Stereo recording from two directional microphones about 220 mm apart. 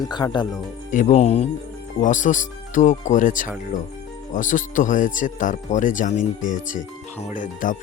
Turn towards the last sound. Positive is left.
turn(degrees=35)  # may be behind; listen again after turning